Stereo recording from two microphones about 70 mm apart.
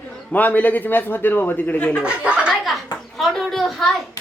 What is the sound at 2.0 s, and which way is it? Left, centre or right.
Speech, centre.